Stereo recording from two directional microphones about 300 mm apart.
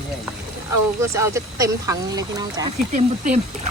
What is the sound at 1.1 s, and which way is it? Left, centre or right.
A woman's voice, centre.